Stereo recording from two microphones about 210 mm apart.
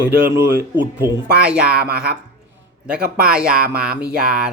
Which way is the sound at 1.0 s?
5° right (ahead or behind).